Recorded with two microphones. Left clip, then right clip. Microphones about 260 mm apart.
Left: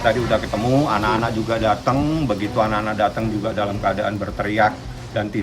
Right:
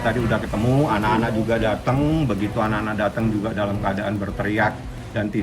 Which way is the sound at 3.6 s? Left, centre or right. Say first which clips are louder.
Left 6 dB; centre.